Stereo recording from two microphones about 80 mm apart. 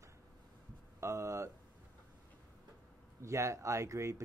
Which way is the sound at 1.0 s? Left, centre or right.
Right.